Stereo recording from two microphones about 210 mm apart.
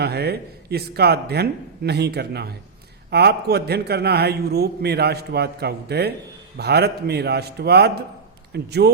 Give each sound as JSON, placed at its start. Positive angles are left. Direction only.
{"t": 0.0, "sound": "a man's voice", "side_deg": -50}